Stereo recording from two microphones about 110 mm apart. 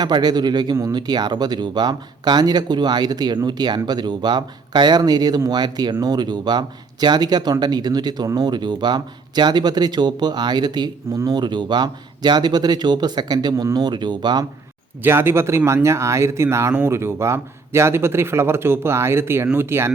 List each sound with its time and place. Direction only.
0.0 s speech: 40° right (ahead or behind)
15.0 s a man's voice: 20° right (ahead or behind)